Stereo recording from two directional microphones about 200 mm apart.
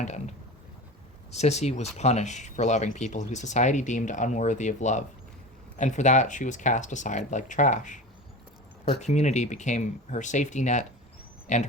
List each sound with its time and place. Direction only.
0.0 s mechanisms: 35° left (ahead or behind)
1.3 s speech: 35° left (ahead or behind)